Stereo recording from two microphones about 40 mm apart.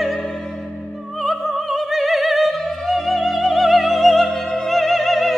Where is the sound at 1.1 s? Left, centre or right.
Centre.